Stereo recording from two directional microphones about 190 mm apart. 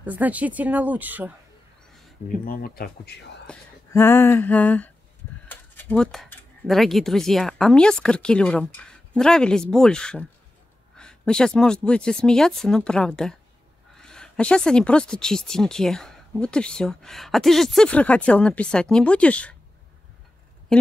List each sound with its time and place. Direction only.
0.0 s speech: 10° right (ahead or behind)
2.2 s speech: 50° left (ahead or behind)
3.4 s speech: 10° left (ahead or behind)
20.7 s speech: 5° left (ahead or behind)